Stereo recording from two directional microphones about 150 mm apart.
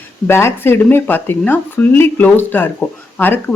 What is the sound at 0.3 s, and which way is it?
Speech, 15° left (ahead or behind).